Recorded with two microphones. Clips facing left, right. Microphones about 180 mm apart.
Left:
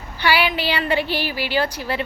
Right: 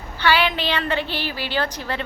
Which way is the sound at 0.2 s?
10° left (ahead or behind).